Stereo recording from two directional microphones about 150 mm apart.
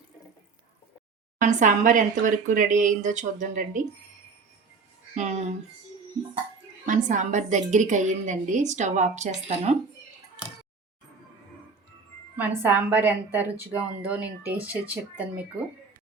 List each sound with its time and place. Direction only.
1.4 s speech: 55° right (ahead or behind)
5.1 s a woman's voice: 50° right (ahead or behind)
6.8 s a woman's voice: 60° right (ahead or behind)
12.4 s a woman's voice: 10° right (ahead or behind)